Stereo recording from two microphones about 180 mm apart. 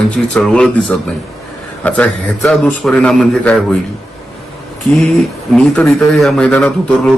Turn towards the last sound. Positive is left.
turn(degrees=5)  # may be behind; listen again after turning